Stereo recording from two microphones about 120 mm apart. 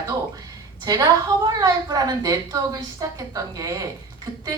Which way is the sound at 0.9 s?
30° right (ahead or behind).